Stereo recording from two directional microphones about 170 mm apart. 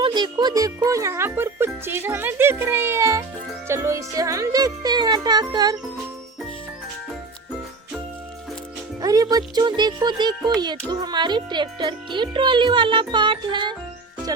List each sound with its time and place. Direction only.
0.0 s music: 25° right (ahead or behind)
9.0 s speech: 20° right (ahead or behind)